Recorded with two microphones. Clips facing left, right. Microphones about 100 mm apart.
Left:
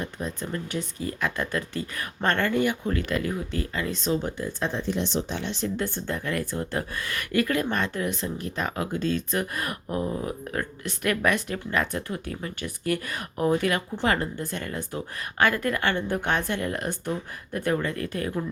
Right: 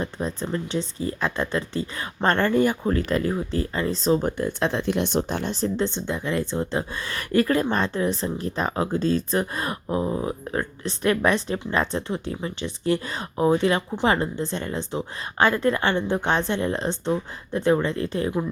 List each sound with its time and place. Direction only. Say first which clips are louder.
0.0 s speech: right 4 dB; 35° right (ahead or behind)
4.3 s speech: right 5 dB; 60° right (ahead or behind); by 18.4 s 25° right (ahead or behind)